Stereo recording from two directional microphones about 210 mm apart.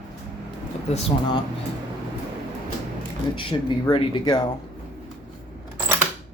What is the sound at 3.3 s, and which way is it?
Speech, 25° left (ahead or behind).